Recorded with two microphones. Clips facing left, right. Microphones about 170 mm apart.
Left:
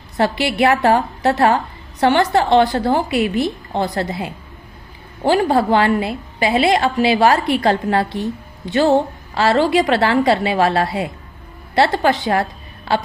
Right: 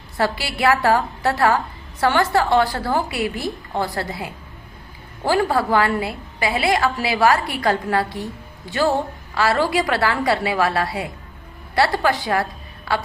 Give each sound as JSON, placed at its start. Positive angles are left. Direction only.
{"t": 0.2, "sound": "a woman's voice", "side_deg": 20}